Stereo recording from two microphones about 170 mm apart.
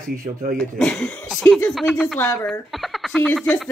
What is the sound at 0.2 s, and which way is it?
Speech, 55° right (ahead or behind).